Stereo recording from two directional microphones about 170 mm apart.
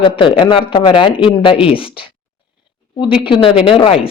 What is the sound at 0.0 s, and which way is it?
Speech, 30° left (ahead or behind).